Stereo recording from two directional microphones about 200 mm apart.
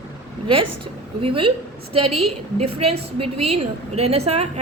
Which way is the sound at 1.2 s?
25° right (ahead or behind).